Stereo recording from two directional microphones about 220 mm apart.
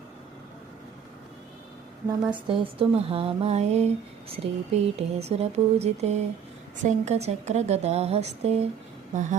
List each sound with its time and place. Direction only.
2.3 s speech: 25° right (ahead or behind)